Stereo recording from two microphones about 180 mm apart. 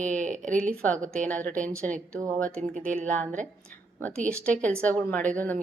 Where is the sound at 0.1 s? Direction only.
45° right (ahead or behind).